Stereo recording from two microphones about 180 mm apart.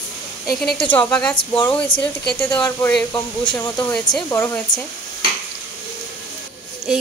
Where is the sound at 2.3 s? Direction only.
10° left (ahead or behind).